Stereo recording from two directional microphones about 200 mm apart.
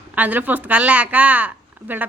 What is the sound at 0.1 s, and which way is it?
A woman's voice, 10° right (ahead or behind).